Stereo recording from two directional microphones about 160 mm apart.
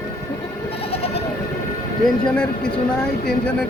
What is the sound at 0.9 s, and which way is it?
Bleat, 40° left (ahead or behind).